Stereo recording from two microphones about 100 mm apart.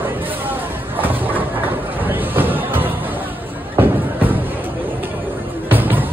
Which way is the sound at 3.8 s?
20° right (ahead or behind).